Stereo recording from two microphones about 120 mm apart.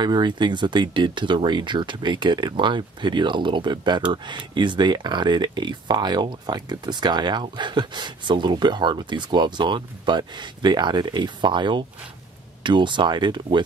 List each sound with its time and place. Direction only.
0.0 s speech: 40° right (ahead or behind)